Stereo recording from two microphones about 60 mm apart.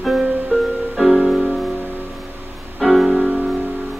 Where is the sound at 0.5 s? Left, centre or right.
Right.